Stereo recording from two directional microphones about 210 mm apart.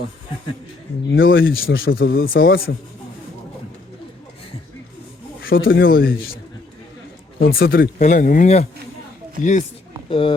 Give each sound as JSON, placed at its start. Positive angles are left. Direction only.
{"t": 1.0, "sound": "speech", "side_deg": 60}
{"t": 1.5, "sound": "a man's voice", "side_deg": 45}
{"t": 1.8, "sound": "speech", "side_deg": 70}
{"t": 2.2, "sound": "a man's voice", "side_deg": 45}
{"t": 5.5, "sound": "speech", "side_deg": 65}
{"t": 5.8, "sound": "a man's voice", "side_deg": 45}
{"t": 7.3, "sound": "speech", "side_deg": 70}
{"t": 7.6, "sound": "speech", "side_deg": 45}
{"t": 10.1, "sound": "speech", "side_deg": 25}